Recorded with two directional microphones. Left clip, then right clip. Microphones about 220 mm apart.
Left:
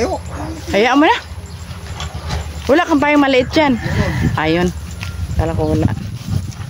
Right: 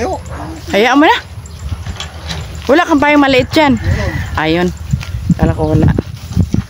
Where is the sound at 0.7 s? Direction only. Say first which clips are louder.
Right 3 dB; 15° right (ahead or behind).